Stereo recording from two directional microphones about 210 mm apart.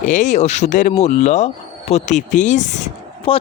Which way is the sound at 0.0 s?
35° left (ahead or behind).